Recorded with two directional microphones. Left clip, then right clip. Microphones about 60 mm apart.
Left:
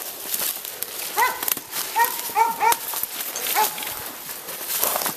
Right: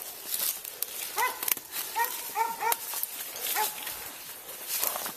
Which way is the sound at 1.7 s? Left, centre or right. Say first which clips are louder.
Left 10 dB; centre.